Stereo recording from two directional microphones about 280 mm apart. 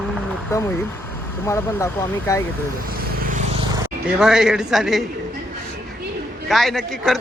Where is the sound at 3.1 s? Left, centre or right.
Right.